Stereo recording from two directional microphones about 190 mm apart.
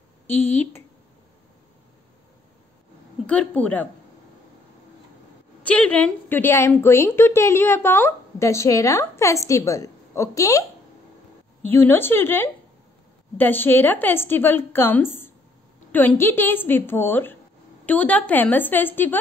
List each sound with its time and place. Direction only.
0.3 s speech: 35° left (ahead or behind)
3.3 s a woman's voice: 5° left (ahead or behind)
5.6 s a woman's voice: 5° left (ahead or behind)
11.6 s a woman's voice: 10° left (ahead or behind)